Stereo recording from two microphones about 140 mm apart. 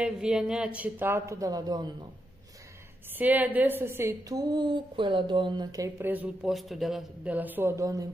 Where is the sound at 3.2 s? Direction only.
10° right (ahead or behind).